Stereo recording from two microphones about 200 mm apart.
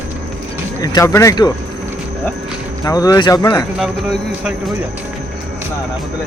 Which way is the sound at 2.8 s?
20° left (ahead or behind).